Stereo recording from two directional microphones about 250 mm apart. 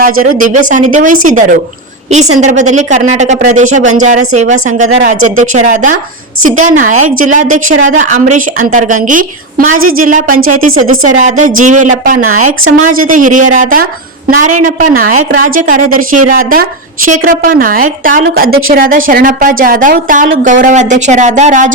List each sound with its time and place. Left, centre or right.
0.0 s a woman's voice: right